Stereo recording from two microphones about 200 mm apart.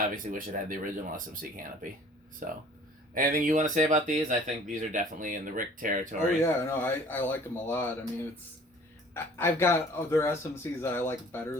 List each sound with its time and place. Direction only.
0.1 s speech: 45° right (ahead or behind)
6.4 s speech: 10° left (ahead or behind)
9.1 s speech: 10° left (ahead or behind)